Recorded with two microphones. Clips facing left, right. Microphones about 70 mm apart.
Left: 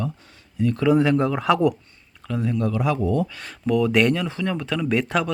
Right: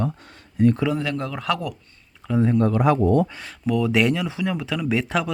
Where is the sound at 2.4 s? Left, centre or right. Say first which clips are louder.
Right 4 dB; right.